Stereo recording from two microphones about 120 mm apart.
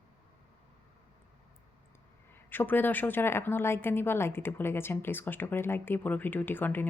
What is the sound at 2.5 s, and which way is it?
A woman's voice, 15° left (ahead or behind).